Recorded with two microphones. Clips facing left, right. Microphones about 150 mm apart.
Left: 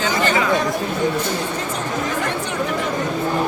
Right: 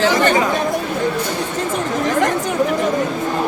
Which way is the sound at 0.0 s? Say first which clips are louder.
Right 5 dB; 75° right (ahead or behind).